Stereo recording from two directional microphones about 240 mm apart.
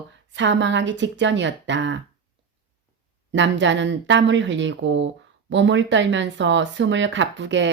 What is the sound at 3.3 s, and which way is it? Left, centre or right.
Speech, right.